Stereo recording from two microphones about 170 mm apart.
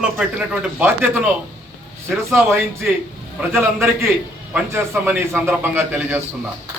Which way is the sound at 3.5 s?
15° right (ahead or behind).